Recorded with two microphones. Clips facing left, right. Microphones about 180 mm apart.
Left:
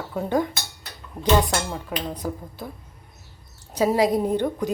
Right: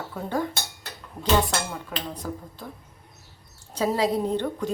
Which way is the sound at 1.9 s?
10° left (ahead or behind).